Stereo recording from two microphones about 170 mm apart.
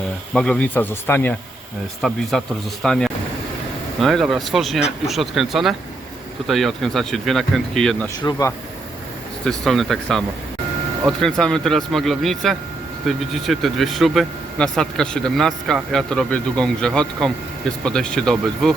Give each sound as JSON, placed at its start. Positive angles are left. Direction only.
{"t": 0.3, "sound": "speech", "side_deg": 5}
{"t": 2.0, "sound": "speech", "side_deg": 0}
{"t": 8.2, "sound": "speech", "side_deg": 20}
{"t": 9.4, "sound": "speech", "side_deg": 0}